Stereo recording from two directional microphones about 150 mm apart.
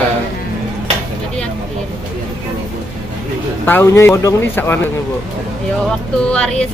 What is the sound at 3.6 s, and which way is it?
A man's voice, 15° left (ahead or behind).